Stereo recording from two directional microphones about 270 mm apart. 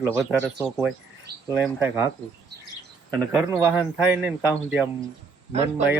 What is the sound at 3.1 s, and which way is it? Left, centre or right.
Speech, centre.